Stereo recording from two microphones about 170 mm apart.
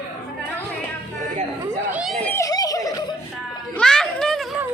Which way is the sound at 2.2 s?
15° left (ahead or behind).